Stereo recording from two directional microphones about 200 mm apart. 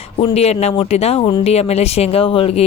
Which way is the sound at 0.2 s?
30° left (ahead or behind).